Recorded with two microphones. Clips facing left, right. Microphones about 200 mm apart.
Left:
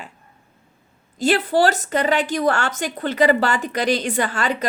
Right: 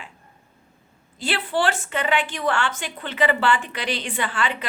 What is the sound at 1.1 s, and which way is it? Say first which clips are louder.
A woman's voice: left 7 dB; 45° left (ahead or behind).